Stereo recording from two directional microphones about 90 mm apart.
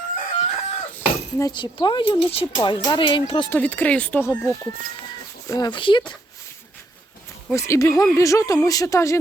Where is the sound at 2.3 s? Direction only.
75° left (ahead or behind).